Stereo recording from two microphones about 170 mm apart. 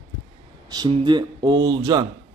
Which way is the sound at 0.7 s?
25° right (ahead or behind).